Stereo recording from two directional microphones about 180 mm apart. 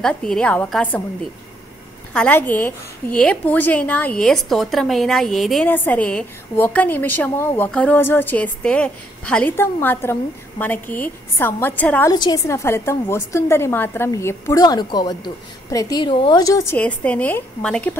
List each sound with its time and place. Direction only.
0.0 s a woman's voice: 5° left (ahead or behind)
2.1 s a woman's voice: 10° left (ahead or behind)
12.1 s a woman's voice: 20° left (ahead or behind); by 17.9 s 5° left (ahead or behind)